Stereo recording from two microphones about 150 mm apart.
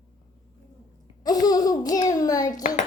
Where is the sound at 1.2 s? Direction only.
25° left (ahead or behind).